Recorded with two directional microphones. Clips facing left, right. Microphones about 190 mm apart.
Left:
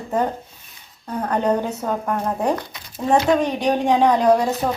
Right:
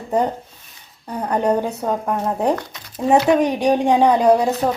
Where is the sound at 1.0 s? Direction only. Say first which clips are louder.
Right 1 dB; 15° right (ahead or behind).